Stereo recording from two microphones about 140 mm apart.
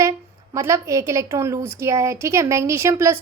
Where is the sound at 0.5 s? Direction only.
20° right (ahead or behind).